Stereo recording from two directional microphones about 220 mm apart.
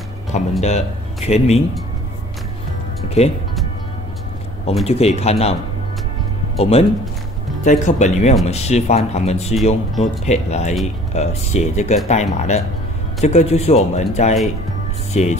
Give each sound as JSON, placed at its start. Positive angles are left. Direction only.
{"t": 0.3, "sound": "speech", "side_deg": 30}
{"t": 3.2, "sound": "speech", "side_deg": 30}
{"t": 4.8, "sound": "speech", "side_deg": 30}
{"t": 6.6, "sound": "speech", "side_deg": 25}